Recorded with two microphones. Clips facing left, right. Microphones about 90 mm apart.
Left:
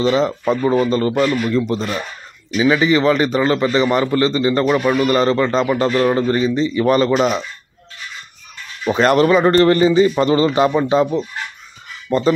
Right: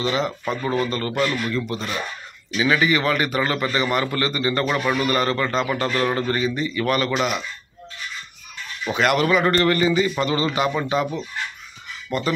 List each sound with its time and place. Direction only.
0.0 s a man's voice: 30° left (ahead or behind)
2.5 s speech: 15° left (ahead or behind)
2.8 s a man's voice: 25° left (ahead or behind)
5.9 s a man's voice: 20° left (ahead or behind)
8.8 s a man's voice: 35° left (ahead or behind)